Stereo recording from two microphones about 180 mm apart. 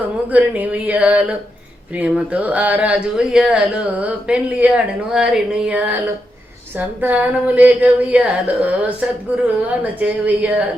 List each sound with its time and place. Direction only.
0.3 s a woman's voice: 10° right (ahead or behind)